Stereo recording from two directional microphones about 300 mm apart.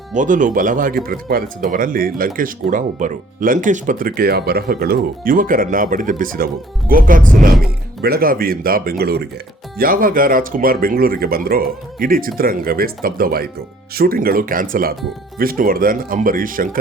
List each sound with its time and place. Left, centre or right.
0.1 s speech: right